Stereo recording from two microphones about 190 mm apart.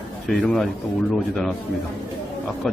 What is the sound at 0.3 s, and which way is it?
Speech, 5° left (ahead or behind).